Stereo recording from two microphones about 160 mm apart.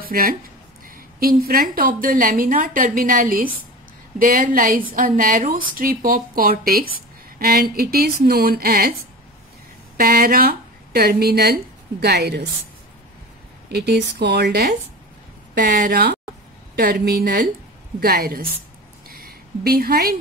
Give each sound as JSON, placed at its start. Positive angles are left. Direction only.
{"t": 0.0, "sound": "a woman's voice", "side_deg": -65}
{"t": 9.9, "sound": "speech", "side_deg": -70}
{"t": 13.7, "sound": "speech", "side_deg": -90}
{"t": 15.6, "sound": "speech", "side_deg": -65}
{"t": 19.0, "sound": "a sound", "side_deg": -70}